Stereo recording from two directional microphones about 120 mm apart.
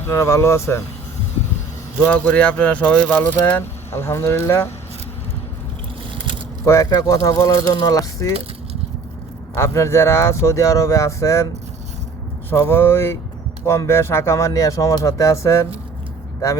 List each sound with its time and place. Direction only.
0.0 s speech: 25° left (ahead or behind)
2.0 s speech: 10° left (ahead or behind)
6.7 s speech: 25° left (ahead or behind)
9.6 s speech: 25° left (ahead or behind)
12.5 s speech: 20° left (ahead or behind)